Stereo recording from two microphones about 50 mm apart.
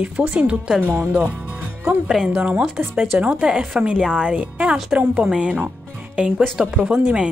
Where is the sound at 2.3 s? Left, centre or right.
Right.